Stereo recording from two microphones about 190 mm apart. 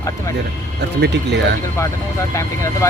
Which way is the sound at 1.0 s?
65° right (ahead or behind).